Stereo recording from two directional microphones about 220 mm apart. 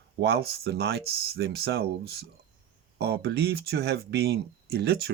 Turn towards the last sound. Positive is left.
turn(degrees=-45)  # may be behind; listen again after turning